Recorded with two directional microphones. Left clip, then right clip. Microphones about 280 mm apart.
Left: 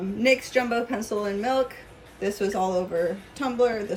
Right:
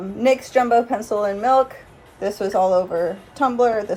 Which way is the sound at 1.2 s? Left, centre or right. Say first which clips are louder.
Right 8 dB; right.